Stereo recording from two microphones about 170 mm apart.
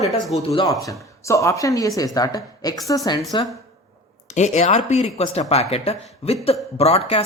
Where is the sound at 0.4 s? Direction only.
25° left (ahead or behind).